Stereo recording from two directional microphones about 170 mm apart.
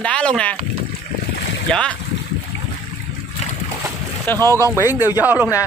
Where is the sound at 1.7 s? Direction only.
5° left (ahead or behind).